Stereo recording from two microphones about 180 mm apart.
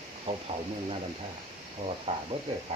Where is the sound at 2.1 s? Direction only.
30° right (ahead or behind).